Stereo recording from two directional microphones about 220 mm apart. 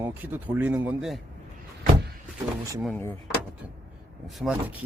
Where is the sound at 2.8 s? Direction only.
5° left (ahead or behind).